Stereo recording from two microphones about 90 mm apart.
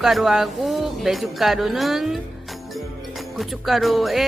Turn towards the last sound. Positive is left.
turn(degrees=0)  # may be behind; listen again after turning